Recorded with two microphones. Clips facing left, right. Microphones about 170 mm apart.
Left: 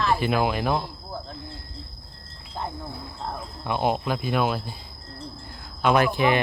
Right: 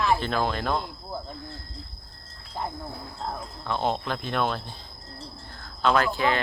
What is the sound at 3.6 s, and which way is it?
Speech, 10° left (ahead or behind).